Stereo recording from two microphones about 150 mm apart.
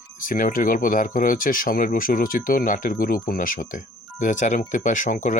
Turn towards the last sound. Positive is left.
turn(degrees=60)  # may be behind; listen again after turning